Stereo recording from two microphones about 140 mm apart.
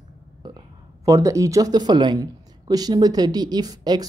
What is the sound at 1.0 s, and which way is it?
Speech, 25° right (ahead or behind).